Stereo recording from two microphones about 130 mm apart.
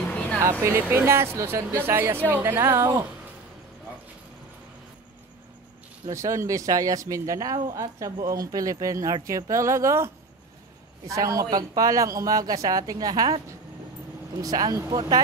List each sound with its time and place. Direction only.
0.1 s a sound: 10° left (ahead or behind)
0.4 s speech: 20° right (ahead or behind)
6.0 s speech: 25° right (ahead or behind)